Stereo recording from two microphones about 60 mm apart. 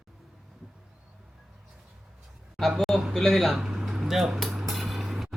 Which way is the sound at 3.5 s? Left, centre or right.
Centre.